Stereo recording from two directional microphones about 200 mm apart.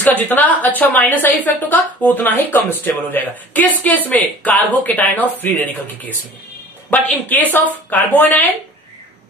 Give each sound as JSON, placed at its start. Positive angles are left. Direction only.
{"t": 0.2, "sound": "a woman's voice", "side_deg": 10}